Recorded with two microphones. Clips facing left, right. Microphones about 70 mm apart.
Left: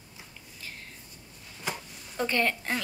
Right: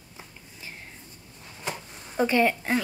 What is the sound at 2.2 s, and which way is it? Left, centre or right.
Speech, centre.